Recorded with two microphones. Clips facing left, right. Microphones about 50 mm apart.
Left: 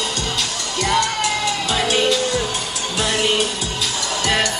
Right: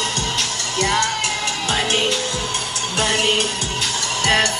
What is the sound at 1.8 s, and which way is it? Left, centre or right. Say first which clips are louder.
Music: left 6 dB; right.